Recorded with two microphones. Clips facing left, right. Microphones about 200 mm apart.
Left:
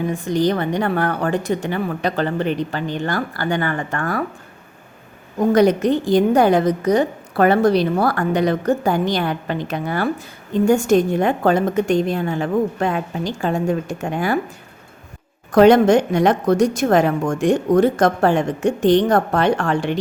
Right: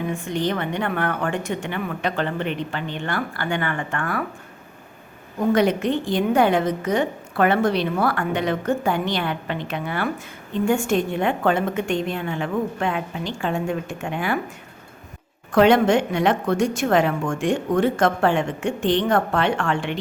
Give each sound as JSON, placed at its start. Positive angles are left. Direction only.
{"t": 0.1, "sound": "a woman's voice", "side_deg": 35}
{"t": 5.5, "sound": "a woman's voice", "side_deg": 40}
{"t": 15.5, "sound": "a woman's voice", "side_deg": 40}